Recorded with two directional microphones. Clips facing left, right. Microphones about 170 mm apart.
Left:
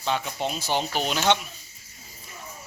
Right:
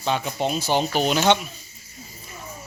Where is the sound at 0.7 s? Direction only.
75° right (ahead or behind).